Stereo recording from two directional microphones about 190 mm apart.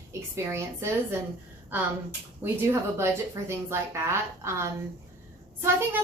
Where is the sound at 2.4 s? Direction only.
10° right (ahead or behind).